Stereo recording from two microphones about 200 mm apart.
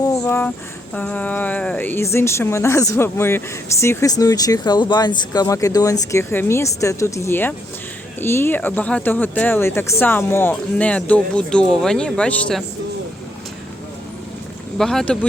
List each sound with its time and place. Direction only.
0.1 s a sound: 15° left (ahead or behind)
0.9 s speech: 5° left (ahead or behind)
14.8 s speech: centre (ahead or behind)